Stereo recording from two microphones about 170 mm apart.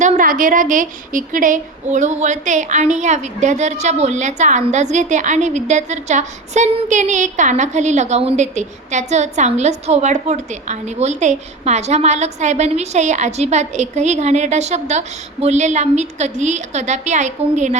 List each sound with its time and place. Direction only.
0.0 s a woman's voice: 50° right (ahead or behind)